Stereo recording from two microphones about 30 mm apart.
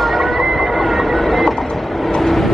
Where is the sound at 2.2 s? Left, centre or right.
Centre.